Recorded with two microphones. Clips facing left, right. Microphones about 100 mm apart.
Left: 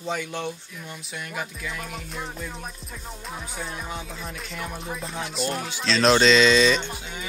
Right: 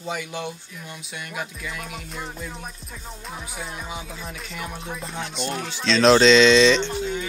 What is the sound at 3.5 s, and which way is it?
Music, centre (ahead or behind).